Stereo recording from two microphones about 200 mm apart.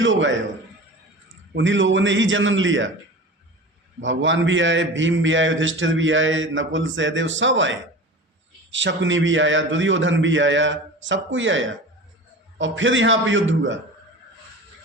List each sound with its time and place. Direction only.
0.0 s a man's voice: 70° right (ahead or behind)
1.5 s a man's voice: 65° right (ahead or behind)
4.0 s a man's voice: 70° right (ahead or behind)